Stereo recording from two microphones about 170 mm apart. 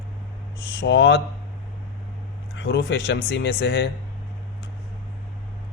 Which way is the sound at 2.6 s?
85° left.